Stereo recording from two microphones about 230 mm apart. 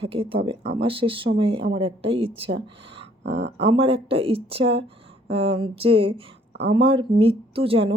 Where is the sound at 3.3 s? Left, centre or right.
Right.